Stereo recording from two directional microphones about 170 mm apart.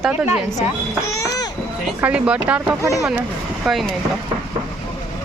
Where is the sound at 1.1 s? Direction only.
20° left (ahead or behind).